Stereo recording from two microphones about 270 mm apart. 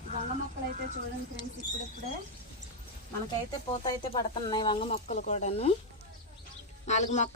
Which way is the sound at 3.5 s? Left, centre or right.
Centre.